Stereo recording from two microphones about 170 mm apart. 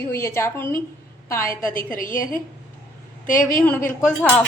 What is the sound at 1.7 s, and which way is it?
A woman's voice, 55° left (ahead or behind).